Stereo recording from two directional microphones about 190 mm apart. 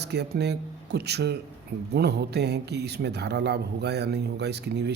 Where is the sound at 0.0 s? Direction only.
60° right (ahead or behind).